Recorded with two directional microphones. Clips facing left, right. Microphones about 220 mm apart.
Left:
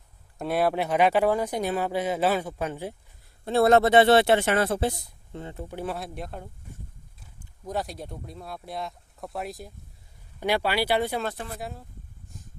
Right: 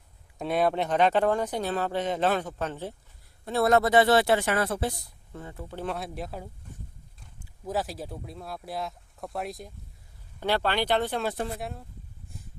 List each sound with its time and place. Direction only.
0.3 s speech: 5° left (ahead or behind)
3.4 s speech: 30° left (ahead or behind)
5.8 s speech: centre (ahead or behind)
7.7 s speech: centre (ahead or behind)